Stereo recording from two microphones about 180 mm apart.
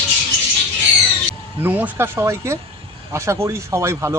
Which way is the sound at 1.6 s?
10° right (ahead or behind).